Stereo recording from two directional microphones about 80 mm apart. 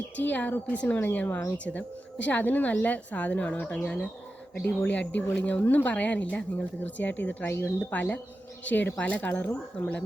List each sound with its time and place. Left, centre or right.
0.2 s a woman's voice: left